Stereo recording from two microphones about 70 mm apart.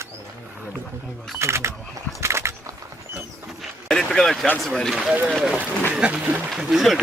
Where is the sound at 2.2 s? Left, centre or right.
Right.